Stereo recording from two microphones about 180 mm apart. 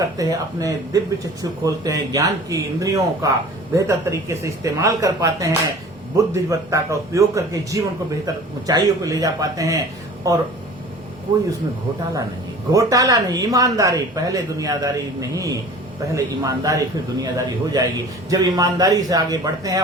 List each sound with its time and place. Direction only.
0.0 s speech: 20° right (ahead or behind)
12.7 s speech: 20° right (ahead or behind)